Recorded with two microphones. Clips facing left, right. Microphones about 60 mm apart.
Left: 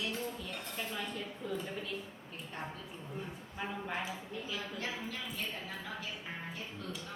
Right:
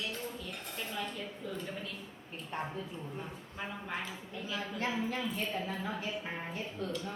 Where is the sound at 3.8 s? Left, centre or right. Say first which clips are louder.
Left 1 dB; centre.